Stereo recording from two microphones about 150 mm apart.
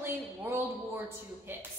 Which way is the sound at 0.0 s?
15° right (ahead or behind).